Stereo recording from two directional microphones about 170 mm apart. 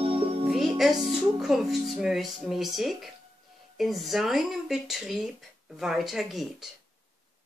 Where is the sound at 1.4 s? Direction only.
Centre (ahead or behind).